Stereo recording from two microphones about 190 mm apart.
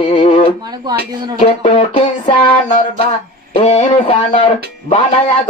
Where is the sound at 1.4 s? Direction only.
30° left (ahead or behind).